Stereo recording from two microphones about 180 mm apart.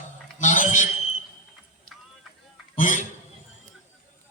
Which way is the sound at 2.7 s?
45° left (ahead or behind).